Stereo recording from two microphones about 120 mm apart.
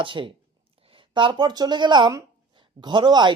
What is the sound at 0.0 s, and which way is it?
A woman's voice, 45° right (ahead or behind).